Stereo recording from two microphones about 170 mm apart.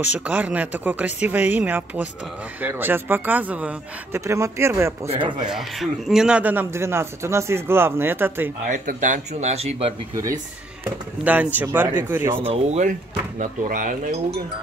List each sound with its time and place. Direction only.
0.0 s a man's voice: 10° right (ahead or behind)
5.0 s speech: 35° right (ahead or behind)
5.5 s a man's voice: centre (ahead or behind)
8.6 s speech: 50° right (ahead or behind)
10.8 s a man's voice: 10° right (ahead or behind)
12.6 s speech: 45° right (ahead or behind)